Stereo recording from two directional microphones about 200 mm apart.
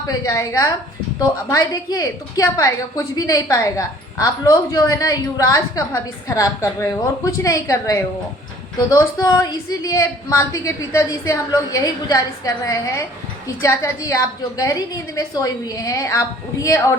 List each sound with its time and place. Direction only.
0.1 s a woman's voice: 15° left (ahead or behind)